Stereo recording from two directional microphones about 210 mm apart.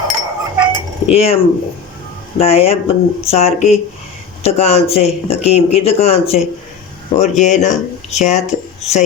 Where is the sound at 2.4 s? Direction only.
30° left (ahead or behind).